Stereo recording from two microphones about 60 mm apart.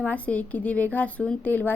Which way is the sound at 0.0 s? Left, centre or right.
Left.